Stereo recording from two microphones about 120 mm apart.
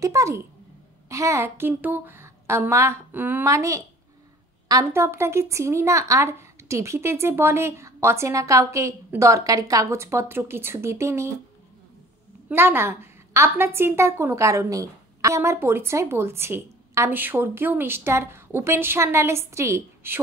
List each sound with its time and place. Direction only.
0.0 s a woman's voice: 25° right (ahead or behind)
12.4 s a woman's voice: 20° right (ahead or behind)